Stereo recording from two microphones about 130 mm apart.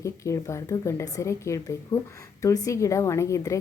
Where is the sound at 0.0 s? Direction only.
25° left (ahead or behind).